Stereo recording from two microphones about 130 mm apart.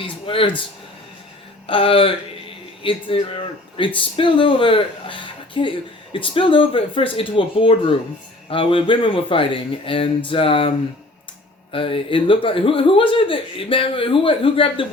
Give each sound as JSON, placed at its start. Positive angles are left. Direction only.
{"t": 0.0, "sound": "a sound", "side_deg": 40}
{"t": 1.6, "sound": "speech", "side_deg": 45}
{"t": 11.7, "sound": "speech", "side_deg": 45}